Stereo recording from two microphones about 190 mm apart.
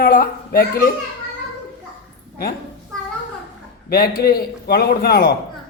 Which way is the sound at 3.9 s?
55° left (ahead or behind).